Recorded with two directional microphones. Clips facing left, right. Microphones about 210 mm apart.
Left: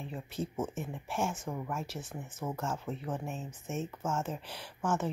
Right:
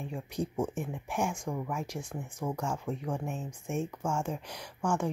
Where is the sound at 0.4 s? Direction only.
15° right (ahead or behind).